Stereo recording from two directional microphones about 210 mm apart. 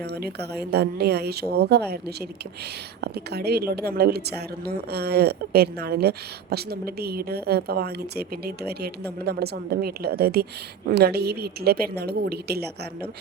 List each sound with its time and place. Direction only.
0.0 s a woman's voice: 50° right (ahead or behind)